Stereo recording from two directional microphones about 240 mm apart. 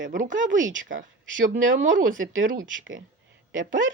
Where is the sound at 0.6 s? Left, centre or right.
Right.